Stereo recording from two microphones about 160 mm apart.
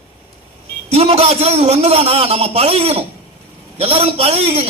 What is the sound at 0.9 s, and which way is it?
A man's voice, 40° right (ahead or behind).